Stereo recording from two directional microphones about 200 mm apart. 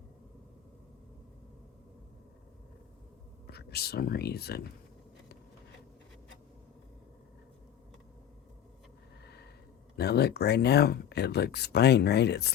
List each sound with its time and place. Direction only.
3.4 s speech: 55° left (ahead or behind)
9.9 s speech: 55° left (ahead or behind)